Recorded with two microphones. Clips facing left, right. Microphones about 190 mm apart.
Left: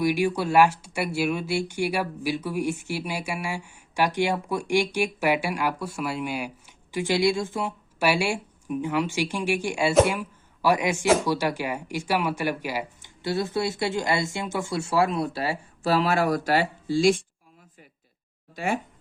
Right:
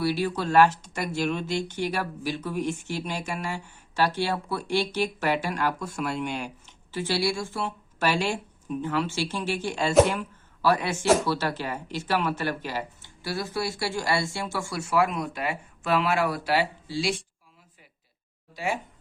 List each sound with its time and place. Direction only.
0.0 s speech: 15° left (ahead or behind)
13.2 s speech: 25° left (ahead or behind); by 17.2 s 50° left (ahead or behind)
18.5 s speech: 50° left (ahead or behind)